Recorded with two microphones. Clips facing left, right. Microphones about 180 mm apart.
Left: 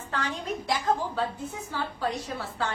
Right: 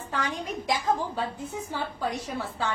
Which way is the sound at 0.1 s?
15° right (ahead or behind).